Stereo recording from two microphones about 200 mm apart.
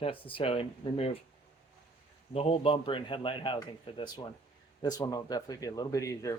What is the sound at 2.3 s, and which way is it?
A man's voice, 30° left (ahead or behind).